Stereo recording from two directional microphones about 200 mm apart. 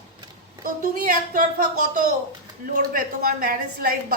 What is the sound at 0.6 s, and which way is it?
Speech, 45° right (ahead or behind).